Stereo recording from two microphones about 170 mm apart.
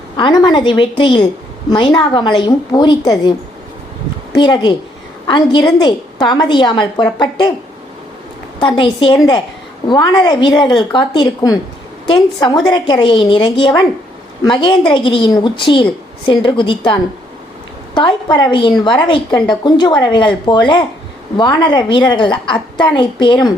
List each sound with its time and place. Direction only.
0.2 s a woman's voice: 25° left (ahead or behind)
4.4 s a woman's voice: 25° left (ahead or behind)
8.5 s a woman's voice: 30° left (ahead or behind)